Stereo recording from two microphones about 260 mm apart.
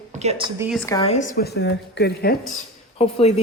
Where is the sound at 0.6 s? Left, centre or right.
Centre.